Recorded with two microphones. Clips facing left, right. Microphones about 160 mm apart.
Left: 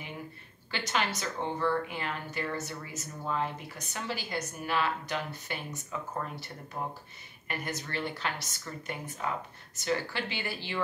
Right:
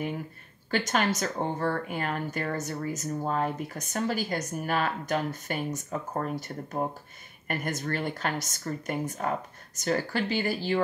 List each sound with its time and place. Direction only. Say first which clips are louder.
0.7 s speech: right 6 dB; 45° right (ahead or behind)